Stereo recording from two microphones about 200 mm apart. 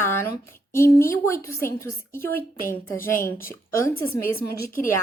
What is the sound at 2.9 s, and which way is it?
Speech, 45° left (ahead or behind).